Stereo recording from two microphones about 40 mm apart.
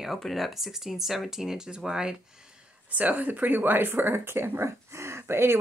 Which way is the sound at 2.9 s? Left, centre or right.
Right.